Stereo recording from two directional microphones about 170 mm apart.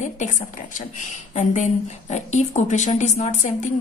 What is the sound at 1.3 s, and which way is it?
A woman's voice, 40° left (ahead or behind).